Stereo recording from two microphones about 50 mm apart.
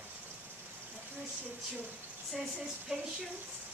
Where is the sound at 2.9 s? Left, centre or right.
Centre.